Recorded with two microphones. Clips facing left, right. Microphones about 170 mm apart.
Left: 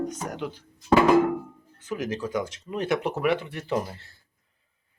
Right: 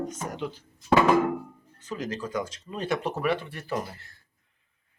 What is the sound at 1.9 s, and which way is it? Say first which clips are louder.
Speech: left 3 dB; 10° left (ahead or behind).